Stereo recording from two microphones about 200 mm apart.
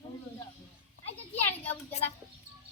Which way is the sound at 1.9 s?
30° left (ahead or behind).